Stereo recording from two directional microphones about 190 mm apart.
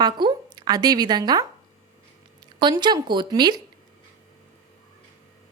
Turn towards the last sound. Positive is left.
turn(degrees=-20)  # may be behind; listen again after turning